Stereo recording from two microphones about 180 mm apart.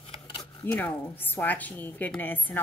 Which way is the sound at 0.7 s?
10° left (ahead or behind).